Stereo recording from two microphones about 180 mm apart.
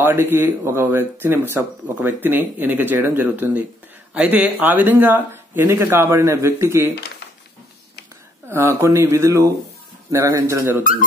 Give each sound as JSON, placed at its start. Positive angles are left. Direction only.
{"t": 0.0, "sound": "speech", "side_deg": -10}
{"t": 8.5, "sound": "speech", "side_deg": -15}
{"t": 10.8, "sound": "speech", "side_deg": 50}